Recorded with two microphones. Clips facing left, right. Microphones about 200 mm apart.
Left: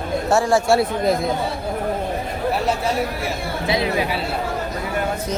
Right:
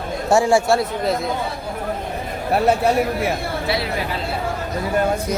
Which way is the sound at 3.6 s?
20° left (ahead or behind).